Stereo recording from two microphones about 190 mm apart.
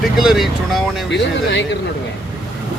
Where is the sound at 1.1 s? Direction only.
65° left (ahead or behind).